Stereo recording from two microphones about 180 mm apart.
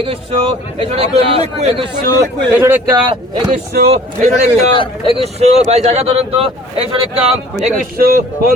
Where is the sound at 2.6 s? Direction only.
15° right (ahead or behind).